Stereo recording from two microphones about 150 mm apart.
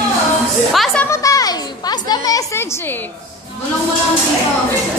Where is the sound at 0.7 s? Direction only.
Centre (ahead or behind).